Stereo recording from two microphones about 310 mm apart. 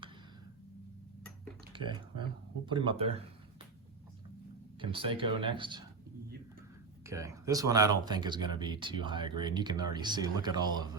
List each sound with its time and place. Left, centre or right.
1.7 s speech: centre
4.8 s speech: centre
7.0 s speech: centre